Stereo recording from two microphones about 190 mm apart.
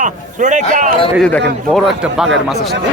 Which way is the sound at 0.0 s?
40° right (ahead or behind).